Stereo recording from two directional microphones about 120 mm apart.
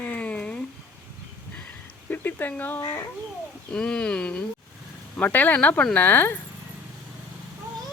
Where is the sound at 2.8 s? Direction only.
25° left (ahead or behind).